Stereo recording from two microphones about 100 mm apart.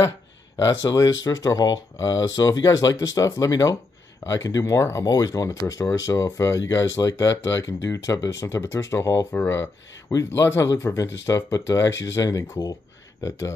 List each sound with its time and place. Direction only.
0.9 s speech: 40° left (ahead or behind)